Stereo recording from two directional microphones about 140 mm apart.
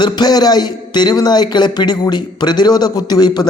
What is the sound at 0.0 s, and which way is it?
A man's voice, 30° left (ahead or behind).